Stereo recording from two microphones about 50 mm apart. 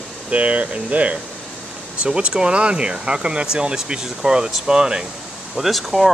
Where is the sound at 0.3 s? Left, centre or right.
Right.